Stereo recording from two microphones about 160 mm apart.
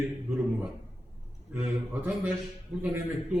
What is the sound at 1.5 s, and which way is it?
A man's voice, 10° right (ahead or behind).